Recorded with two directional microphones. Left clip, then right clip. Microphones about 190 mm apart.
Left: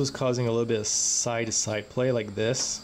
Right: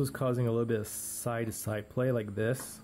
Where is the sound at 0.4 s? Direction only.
30° right (ahead or behind).